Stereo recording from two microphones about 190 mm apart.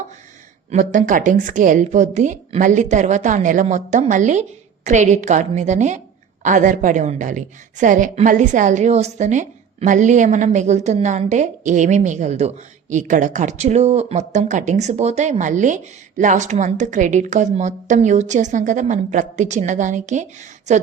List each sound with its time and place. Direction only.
0.7 s speech: 40° right (ahead or behind)